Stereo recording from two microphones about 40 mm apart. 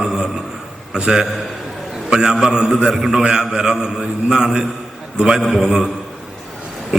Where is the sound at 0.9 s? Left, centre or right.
Centre.